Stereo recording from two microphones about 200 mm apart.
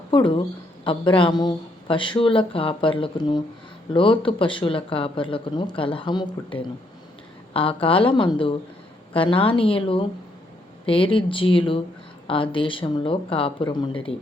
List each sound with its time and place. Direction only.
0.1 s speech: 25° left (ahead or behind)